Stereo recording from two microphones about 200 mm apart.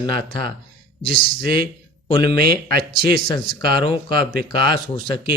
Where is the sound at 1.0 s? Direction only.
45° right (ahead or behind).